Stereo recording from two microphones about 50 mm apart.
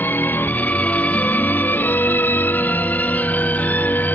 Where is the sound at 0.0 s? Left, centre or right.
Left.